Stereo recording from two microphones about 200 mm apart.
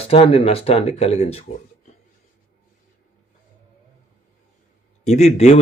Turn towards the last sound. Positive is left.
turn(degrees=30)  # may be behind; listen again after turning